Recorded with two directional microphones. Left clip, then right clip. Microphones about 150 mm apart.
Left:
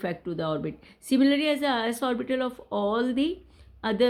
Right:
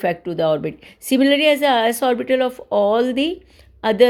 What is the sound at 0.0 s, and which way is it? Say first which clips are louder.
Speech: right 11 dB; 25° right (ahead or behind).